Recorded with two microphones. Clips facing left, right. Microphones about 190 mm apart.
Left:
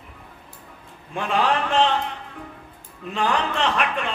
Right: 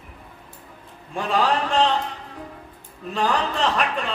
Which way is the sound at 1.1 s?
35° right (ahead or behind).